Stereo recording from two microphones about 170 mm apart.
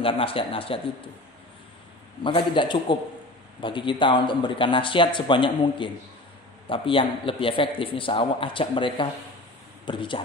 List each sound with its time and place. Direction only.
0.0 s a man's voice: 30° left (ahead or behind)
2.2 s a man's voice: 30° left (ahead or behind)